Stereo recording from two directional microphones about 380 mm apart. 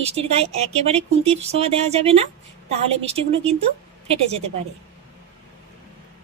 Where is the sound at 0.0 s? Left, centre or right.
Centre.